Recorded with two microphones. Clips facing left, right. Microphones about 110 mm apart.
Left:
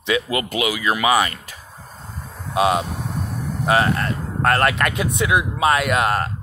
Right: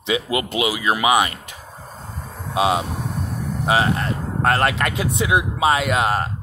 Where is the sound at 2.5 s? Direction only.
25° right (ahead or behind).